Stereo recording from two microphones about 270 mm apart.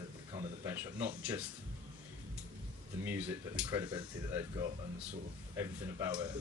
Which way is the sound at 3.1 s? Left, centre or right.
Centre.